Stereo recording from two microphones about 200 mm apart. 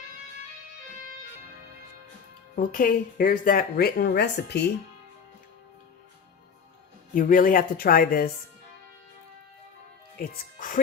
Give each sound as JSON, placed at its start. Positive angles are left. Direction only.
{"t": 2.6, "sound": "speech", "side_deg": 45}
{"t": 7.1, "sound": "speech", "side_deg": 45}
{"t": 10.2, "sound": "speech", "side_deg": 45}